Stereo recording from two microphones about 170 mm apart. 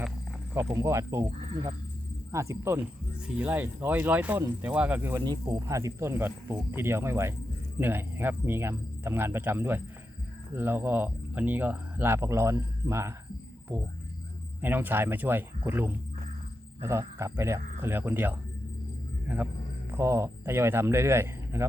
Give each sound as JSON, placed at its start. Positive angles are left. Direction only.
{"t": 0.5, "sound": "speech", "side_deg": -15}
{"t": 14.6, "sound": "speech", "side_deg": -10}
{"t": 19.9, "sound": "speech", "side_deg": -15}